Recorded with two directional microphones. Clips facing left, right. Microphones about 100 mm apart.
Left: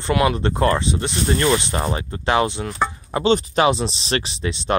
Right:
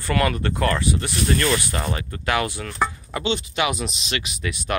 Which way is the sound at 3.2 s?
40° left (ahead or behind).